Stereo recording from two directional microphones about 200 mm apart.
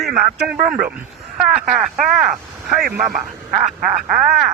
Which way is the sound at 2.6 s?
40° right (ahead or behind).